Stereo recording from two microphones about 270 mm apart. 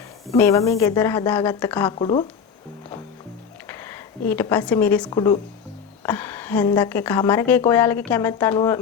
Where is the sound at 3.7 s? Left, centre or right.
Centre.